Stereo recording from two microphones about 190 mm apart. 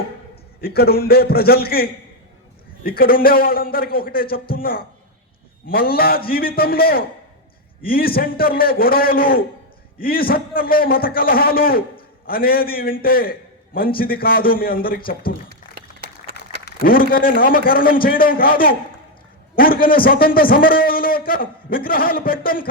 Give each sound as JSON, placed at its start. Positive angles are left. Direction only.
{"t": 0.6, "sound": "a man's voice", "side_deg": 55}
{"t": 15.6, "sound": "a sound", "side_deg": 45}
{"t": 16.6, "sound": "a man's voice", "side_deg": 50}